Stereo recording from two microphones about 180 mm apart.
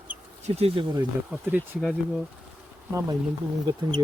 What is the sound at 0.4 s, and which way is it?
Speech, 35° right (ahead or behind).